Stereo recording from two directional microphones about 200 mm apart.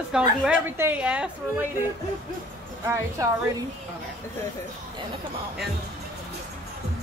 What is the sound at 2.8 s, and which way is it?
Speech, 15° right (ahead or behind).